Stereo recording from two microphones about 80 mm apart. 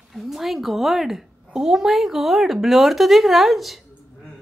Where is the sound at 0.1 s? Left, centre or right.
Centre.